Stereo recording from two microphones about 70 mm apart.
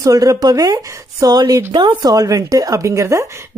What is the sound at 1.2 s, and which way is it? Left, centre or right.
A woman's voice, right.